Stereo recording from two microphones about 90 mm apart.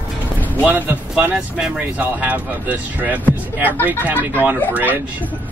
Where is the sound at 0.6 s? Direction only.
20° right (ahead or behind).